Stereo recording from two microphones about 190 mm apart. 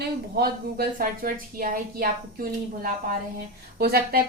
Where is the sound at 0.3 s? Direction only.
50° right (ahead or behind).